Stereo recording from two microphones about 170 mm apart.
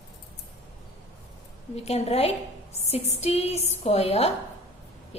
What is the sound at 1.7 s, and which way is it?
A woman's voice, 40° left (ahead or behind).